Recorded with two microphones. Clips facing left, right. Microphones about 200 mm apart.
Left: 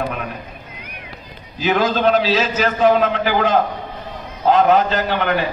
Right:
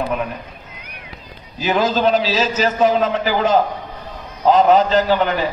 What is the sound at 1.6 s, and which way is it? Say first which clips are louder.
A man's voice: even; 60° left (ahead or behind).